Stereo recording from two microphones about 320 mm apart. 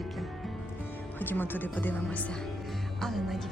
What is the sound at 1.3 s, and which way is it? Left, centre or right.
Speech, centre.